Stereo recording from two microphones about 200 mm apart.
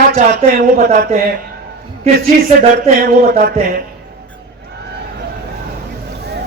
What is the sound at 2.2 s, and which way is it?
Speech, 40° right (ahead or behind).